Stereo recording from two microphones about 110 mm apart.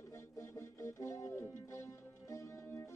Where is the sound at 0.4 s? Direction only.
25° left (ahead or behind).